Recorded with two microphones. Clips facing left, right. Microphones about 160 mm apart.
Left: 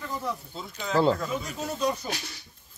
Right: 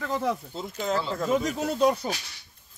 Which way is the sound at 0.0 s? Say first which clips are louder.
Right 5 dB; 85° right.